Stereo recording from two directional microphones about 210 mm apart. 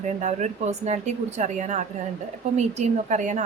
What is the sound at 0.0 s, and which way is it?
Speech, 35° right (ahead or behind).